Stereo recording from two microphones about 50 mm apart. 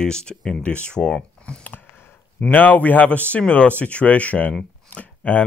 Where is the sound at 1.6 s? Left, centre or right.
Left.